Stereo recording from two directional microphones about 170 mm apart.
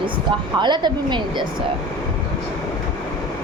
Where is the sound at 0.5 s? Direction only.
25° right (ahead or behind).